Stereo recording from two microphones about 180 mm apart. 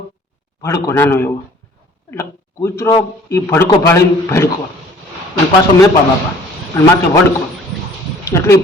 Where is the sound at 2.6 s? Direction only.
15° left (ahead or behind).